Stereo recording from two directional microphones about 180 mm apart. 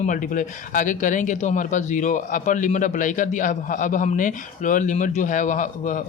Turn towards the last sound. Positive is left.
turn(degrees=45)  # may be behind; listen again after turning